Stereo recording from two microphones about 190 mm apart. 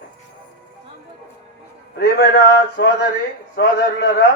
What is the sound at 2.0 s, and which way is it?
A man's voice, 60° left (ahead or behind).